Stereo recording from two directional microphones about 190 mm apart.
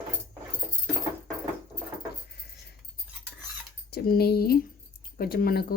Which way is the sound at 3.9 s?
55° left (ahead or behind).